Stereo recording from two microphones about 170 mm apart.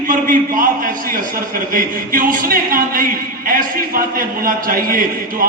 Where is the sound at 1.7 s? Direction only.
55° right (ahead or behind).